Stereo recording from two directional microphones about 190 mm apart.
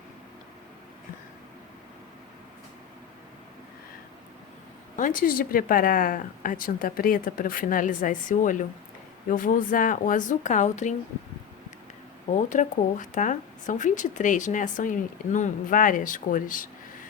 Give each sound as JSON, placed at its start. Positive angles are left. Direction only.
{"t": 4.9, "sound": "speech", "side_deg": 45}
{"t": 12.3, "sound": "speech", "side_deg": 40}